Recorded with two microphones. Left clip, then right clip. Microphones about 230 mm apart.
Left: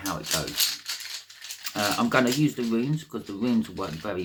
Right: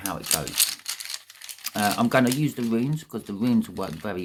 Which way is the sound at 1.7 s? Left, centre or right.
Right.